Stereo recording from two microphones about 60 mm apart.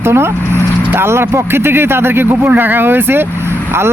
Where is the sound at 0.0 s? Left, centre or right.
Right.